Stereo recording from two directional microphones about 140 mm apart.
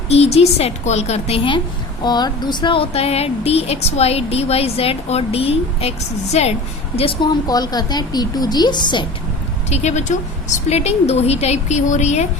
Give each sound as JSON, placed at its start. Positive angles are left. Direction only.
{"t": 0.1, "sound": "speech", "side_deg": 50}
{"t": 2.0, "sound": "speech", "side_deg": 30}
{"t": 9.6, "sound": "speech", "side_deg": 50}